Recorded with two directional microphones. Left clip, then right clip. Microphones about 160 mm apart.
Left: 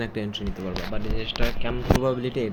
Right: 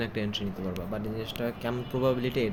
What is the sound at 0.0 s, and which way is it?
Speech, 25° left (ahead or behind).